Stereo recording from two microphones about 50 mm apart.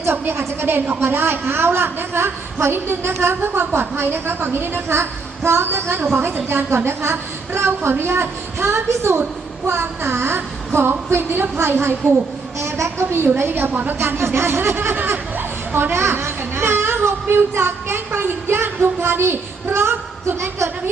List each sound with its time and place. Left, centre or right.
0.0 s a woman's voice: right
12.5 s a woman's voice: right
14.0 s a woman's voice: right
14.9 s speech: right